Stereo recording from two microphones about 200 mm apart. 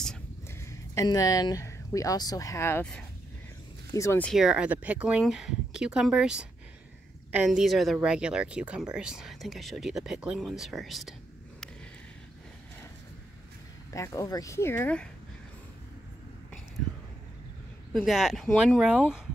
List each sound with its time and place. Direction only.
0.6 s speech: 15° left (ahead or behind)
4.3 s speech: 5° right (ahead or behind)
13.9 s speech: 15° left (ahead or behind)
17.9 s speech: centre (ahead or behind)